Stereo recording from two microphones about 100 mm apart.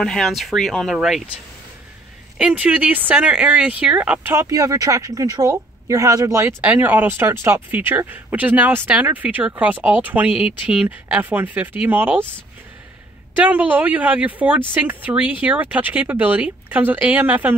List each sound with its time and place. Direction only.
0.0 s speech: 5° left (ahead or behind)
2.3 s speech: 10° right (ahead or behind)
4.3 s a woman's voice: 30° right (ahead or behind)
13.4 s speech: 15° right (ahead or behind)